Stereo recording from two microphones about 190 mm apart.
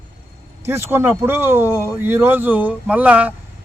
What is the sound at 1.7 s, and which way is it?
Speech, 15° left (ahead or behind).